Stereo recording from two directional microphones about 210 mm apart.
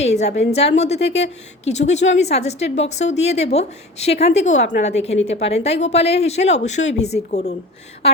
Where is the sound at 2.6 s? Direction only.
60° left (ahead or behind).